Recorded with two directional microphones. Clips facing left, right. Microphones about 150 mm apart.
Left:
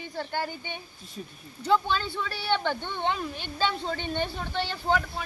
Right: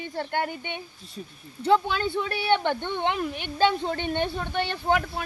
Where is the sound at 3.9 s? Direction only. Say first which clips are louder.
Right 3 dB; 60° right (ahead or behind).